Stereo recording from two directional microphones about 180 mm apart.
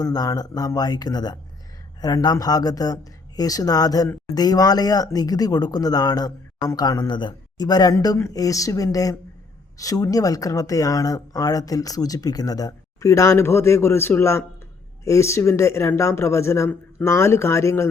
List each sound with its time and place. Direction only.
0.0 s speech: 20° left (ahead or behind)